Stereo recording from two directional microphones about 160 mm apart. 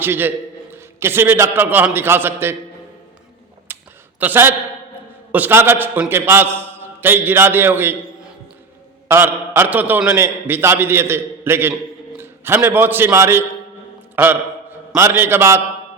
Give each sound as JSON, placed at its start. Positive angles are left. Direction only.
{"t": 0.0, "sound": "a man's voice", "side_deg": -10}
{"t": 3.7, "sound": "a sound", "side_deg": -15}
{"t": 4.2, "sound": "a man's voice", "side_deg": -10}